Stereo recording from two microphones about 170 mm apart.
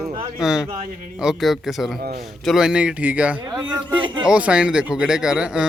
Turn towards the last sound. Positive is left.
turn(degrees=-5)  # may be behind; listen again after turning